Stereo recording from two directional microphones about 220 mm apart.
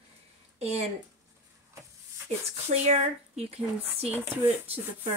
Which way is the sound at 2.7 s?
30° right (ahead or behind).